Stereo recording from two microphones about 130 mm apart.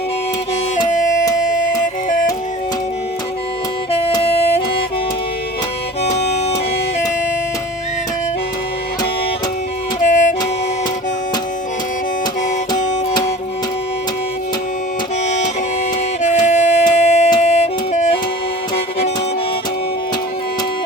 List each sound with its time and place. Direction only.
0.9 s music: 75° left (ahead or behind)
4.2 s music: 50° left (ahead or behind)
6.1 s music: 55° left (ahead or behind)
10.0 s music: 70° left (ahead or behind)
16.2 s music: 65° left (ahead or behind)